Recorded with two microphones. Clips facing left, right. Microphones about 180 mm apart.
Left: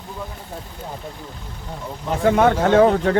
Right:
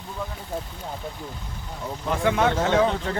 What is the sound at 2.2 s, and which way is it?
Speech, 45° left (ahead or behind).